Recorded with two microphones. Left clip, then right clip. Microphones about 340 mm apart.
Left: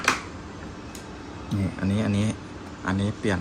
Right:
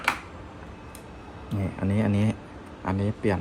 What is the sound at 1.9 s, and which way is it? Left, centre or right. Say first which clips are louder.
Speech: right 1 dB; centre.